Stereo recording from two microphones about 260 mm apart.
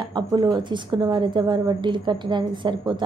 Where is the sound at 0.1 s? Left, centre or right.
Centre.